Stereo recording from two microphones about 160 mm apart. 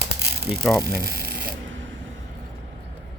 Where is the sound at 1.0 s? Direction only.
70° right (ahead or behind).